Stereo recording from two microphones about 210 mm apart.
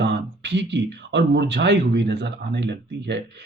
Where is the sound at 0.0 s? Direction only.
55° right (ahead or behind).